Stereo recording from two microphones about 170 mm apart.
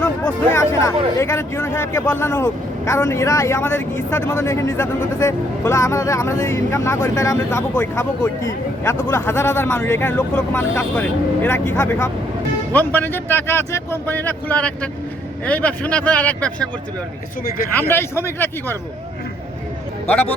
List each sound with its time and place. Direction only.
0.5 s speech: 15° left (ahead or behind)
17.7 s speech: 10° left (ahead or behind)